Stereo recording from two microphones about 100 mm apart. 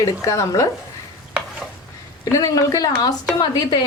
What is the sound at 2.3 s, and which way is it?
A woman's voice, 35° left (ahead or behind).